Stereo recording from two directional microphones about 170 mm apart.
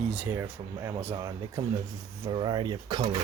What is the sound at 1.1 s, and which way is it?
Speech, 25° right (ahead or behind).